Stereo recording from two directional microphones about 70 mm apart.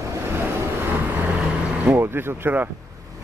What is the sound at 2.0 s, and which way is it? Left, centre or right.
Speech, right.